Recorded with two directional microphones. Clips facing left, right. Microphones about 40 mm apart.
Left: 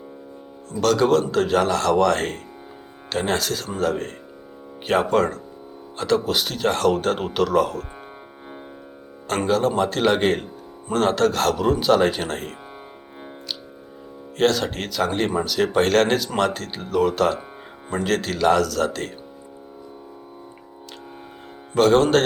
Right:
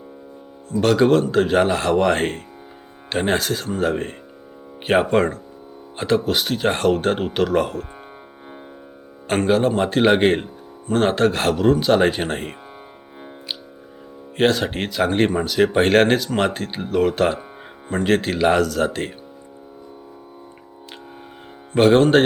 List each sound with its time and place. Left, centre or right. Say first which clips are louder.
0.8 s speech: right 2 dB; centre
9.5 s speech: right 2 dB; centre
11.5 s speech: right 2 dB; centre
11.9 s speech: right 2 dB; centre
14.3 s speech: right 2 dB; centre
16.1 s speech: right 1 dB; centre
21.9 s speech: right 3 dB; centre